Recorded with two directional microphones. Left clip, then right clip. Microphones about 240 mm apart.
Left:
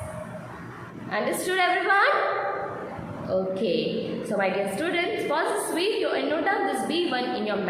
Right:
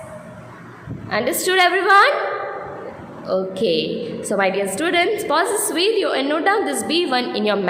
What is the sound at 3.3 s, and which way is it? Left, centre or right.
A woman's voice, right.